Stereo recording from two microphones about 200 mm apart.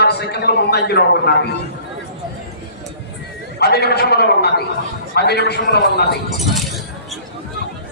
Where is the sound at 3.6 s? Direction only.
55° left (ahead or behind).